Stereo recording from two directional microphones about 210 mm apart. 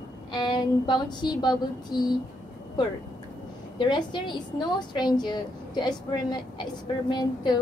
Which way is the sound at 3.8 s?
20° left (ahead or behind).